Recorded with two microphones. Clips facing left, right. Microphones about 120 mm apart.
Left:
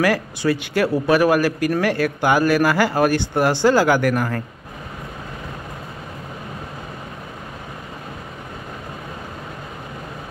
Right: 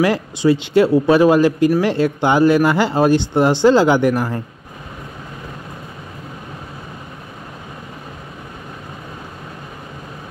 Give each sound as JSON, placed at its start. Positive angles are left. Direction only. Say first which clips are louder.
{"t": 0.0, "sound": "a man's voice", "louder": "right 3 dB", "side_deg": -20}